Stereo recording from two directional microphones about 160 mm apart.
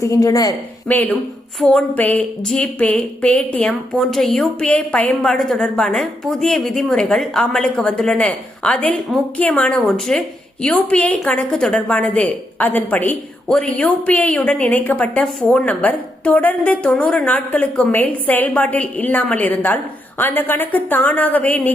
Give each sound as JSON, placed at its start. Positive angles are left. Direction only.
{"t": 0.0, "sound": "speech", "side_deg": 20}
{"t": 0.9, "sound": "a woman's voice", "side_deg": 10}